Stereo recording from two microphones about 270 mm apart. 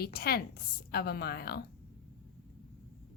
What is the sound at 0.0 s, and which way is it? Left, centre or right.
A woman's voice, left.